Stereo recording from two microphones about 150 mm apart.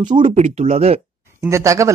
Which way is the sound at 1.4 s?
20° right (ahead or behind).